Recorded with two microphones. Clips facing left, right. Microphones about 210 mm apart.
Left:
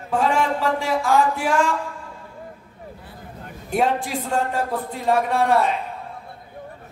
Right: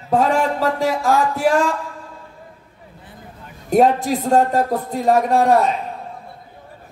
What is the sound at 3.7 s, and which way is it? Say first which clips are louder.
Speech: right 7 dB; 40° right (ahead or behind).